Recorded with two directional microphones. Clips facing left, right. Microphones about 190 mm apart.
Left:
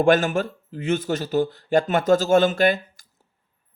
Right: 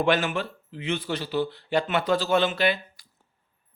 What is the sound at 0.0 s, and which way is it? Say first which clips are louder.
Speech: left 6 dB; 45° left (ahead or behind).